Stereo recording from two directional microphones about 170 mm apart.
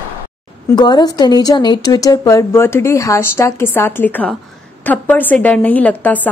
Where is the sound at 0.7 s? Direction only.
25° left (ahead or behind).